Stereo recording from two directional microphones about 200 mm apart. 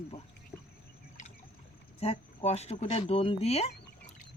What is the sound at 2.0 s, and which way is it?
Speech, 30° left (ahead or behind).